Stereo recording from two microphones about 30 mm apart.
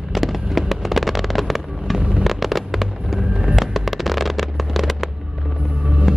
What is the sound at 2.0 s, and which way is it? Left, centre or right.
Fireworks, right.